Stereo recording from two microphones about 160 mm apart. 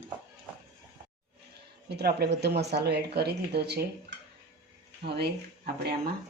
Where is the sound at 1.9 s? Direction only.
90° right.